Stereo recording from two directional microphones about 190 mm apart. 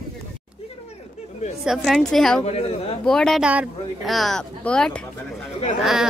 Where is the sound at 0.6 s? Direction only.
35° left (ahead or behind).